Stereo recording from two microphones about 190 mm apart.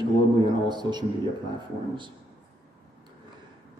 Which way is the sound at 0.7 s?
25° right (ahead or behind).